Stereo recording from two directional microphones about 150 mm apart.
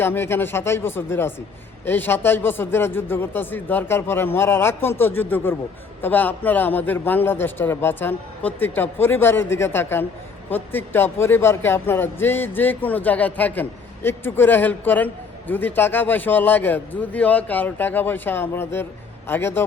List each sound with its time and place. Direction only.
0.0 s speech: 15° left (ahead or behind)